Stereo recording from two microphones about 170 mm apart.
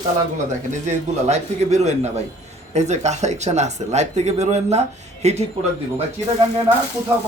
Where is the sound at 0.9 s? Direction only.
40° right (ahead or behind).